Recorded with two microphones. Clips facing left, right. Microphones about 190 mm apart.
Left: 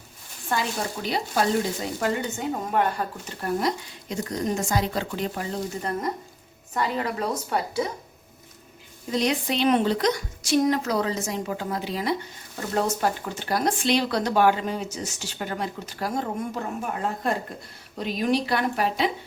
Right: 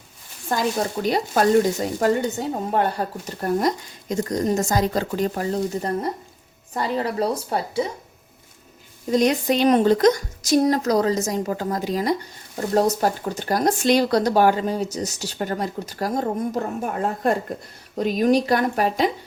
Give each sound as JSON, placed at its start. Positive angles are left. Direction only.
{"t": 0.5, "sound": "speech", "side_deg": -45}
{"t": 9.0, "sound": "speech", "side_deg": -45}